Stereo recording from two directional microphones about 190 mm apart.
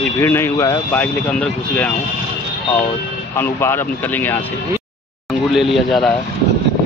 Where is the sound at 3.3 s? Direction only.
10° left (ahead or behind).